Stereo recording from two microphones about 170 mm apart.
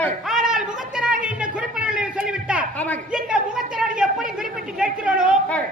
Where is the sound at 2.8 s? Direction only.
10° left (ahead or behind).